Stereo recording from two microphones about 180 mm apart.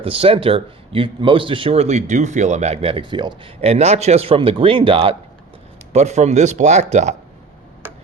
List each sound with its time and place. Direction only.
0.0 s a man's voice: 30° right (ahead or behind)